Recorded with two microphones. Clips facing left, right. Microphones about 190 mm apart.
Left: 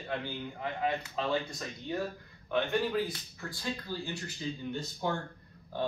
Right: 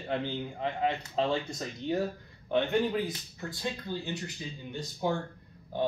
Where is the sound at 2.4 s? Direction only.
20° right (ahead or behind).